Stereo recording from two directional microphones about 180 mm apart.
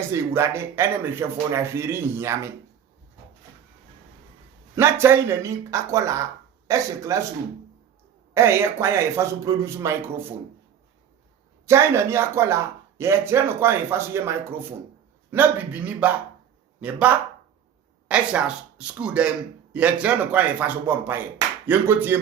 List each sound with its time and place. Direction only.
0.1 s speech: 15° right (ahead or behind)
4.7 s speech: 15° right (ahead or behind)
8.3 s speech: 15° right (ahead or behind)
11.6 s speech: 15° right (ahead or behind)
21.3 s a sound: 10° right (ahead or behind)